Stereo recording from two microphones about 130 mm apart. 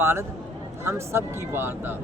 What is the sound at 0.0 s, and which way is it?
Speech, 20° right (ahead or behind).